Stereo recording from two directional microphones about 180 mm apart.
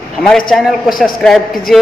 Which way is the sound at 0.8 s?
55° left (ahead or behind).